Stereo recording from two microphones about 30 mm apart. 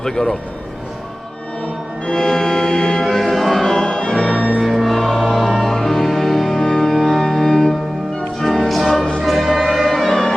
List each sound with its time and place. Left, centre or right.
0.0 s a man's voice: centre
2.0 s music: centre
3.0 s music: centre
3.6 s music: centre
3.8 s music: left
4.6 s choir: centre
5.1 s music: centre
6.9 s organ: centre
7.2 s music: centre